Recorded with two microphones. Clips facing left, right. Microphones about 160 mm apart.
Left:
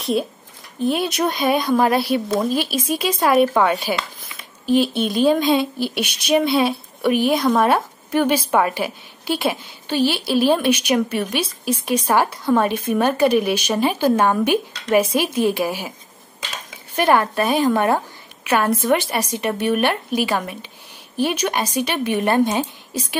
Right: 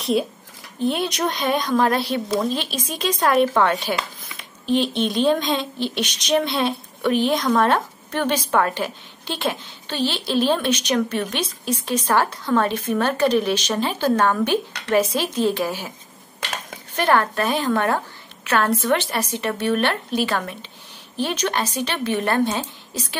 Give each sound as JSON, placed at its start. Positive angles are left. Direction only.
{"t": 0.0, "sound": "speech", "side_deg": 0}
{"t": 16.3, "sound": "dishes", "side_deg": -65}
{"t": 16.9, "sound": "speech", "side_deg": 10}